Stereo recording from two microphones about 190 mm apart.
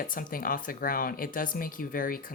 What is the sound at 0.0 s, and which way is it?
Speech, 45° left (ahead or behind).